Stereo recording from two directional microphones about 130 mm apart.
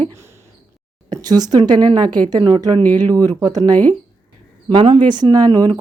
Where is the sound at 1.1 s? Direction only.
30° right (ahead or behind).